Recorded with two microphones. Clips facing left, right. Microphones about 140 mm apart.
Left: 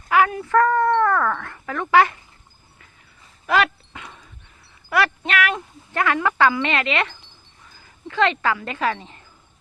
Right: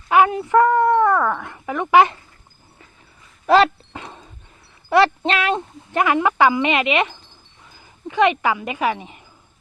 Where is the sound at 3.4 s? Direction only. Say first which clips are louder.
Right 6 dB; 30° right (ahead or behind).